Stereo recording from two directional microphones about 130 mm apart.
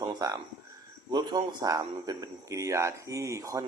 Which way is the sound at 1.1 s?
30° right (ahead or behind).